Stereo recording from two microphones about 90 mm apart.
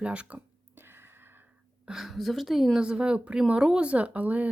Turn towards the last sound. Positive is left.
turn(degrees=-20)  # may be behind; listen again after turning